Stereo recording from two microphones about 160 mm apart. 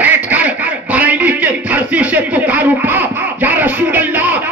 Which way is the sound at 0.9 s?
10° right (ahead or behind).